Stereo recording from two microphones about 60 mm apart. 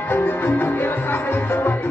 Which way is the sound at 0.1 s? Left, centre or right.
Left.